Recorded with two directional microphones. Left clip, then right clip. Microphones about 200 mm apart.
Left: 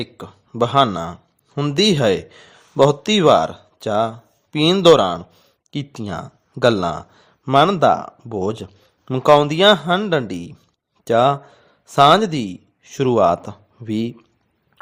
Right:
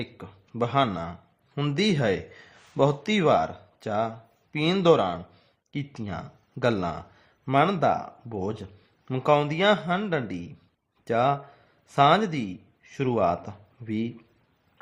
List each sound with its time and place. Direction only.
0.0 s a man's voice: 35° left (ahead or behind)